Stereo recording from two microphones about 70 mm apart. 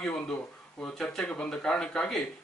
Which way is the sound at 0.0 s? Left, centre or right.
Centre.